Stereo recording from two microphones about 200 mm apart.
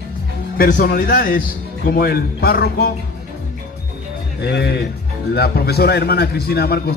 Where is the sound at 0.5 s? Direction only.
45° left (ahead or behind).